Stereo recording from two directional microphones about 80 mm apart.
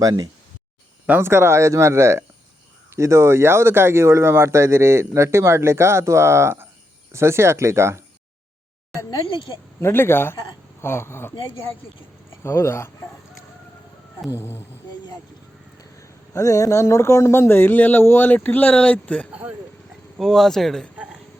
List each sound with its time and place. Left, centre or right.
0.0 s speech: right
1.2 s speech: right
9.8 s a man's voice: left
12.4 s speech: left
14.3 s speech: left
15.8 s a man's voice: left; by 19.3 s centre
19.3 s speech: centre
20.1 s speech: centre